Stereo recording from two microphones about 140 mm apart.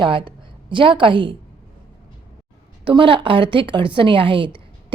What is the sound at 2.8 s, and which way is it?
A woman's voice, 40° right (ahead or behind).